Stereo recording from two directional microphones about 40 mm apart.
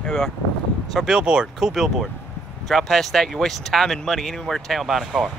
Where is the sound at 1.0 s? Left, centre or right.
Right.